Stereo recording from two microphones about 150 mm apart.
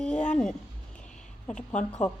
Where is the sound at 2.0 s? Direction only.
5° left (ahead or behind).